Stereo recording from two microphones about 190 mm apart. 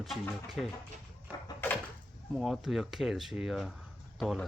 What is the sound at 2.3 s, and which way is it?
Speech, centre (ahead or behind).